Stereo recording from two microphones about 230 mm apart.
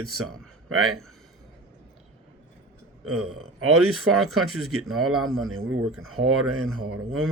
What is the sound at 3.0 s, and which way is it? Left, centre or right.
Speech, right.